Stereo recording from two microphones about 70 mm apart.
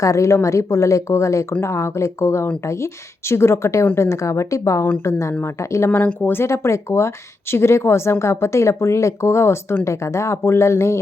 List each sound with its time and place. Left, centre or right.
0.0 s a woman's voice: left
6.0 s a woman's voice: left